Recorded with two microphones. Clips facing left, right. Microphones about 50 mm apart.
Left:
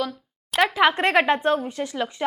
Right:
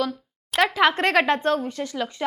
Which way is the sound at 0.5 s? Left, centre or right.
Centre.